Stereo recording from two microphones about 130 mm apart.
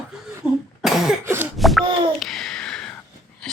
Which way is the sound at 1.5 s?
Centre (ahead or behind).